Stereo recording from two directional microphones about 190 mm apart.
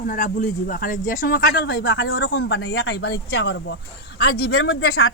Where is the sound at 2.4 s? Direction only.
70° left (ahead or behind).